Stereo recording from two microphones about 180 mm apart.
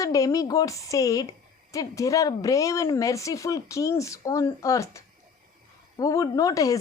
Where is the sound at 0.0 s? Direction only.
20° left (ahead or behind).